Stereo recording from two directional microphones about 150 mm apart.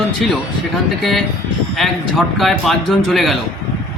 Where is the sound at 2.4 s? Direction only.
Centre (ahead or behind).